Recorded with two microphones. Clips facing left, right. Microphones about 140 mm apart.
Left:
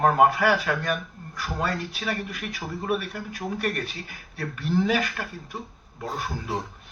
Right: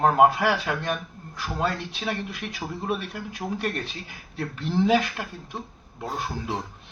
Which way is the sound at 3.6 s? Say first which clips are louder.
Left 1 dB; 25° right (ahead or behind).